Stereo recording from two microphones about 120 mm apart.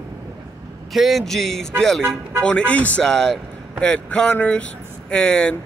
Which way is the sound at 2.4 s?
10° left (ahead or behind).